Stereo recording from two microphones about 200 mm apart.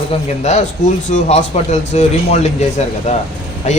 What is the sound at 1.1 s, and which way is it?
Speech, 35° left (ahead or behind).